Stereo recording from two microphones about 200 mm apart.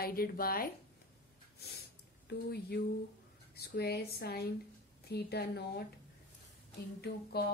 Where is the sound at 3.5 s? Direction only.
50° left (ahead or behind).